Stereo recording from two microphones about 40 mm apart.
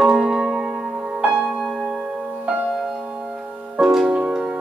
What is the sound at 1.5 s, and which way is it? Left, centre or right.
Music, centre.